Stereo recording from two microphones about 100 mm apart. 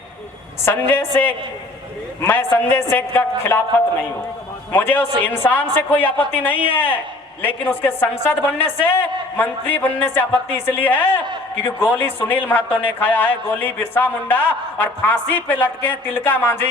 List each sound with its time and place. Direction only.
0.6 s speech: 20° left (ahead or behind)
4.7 s a woman's voice: 20° left (ahead or behind)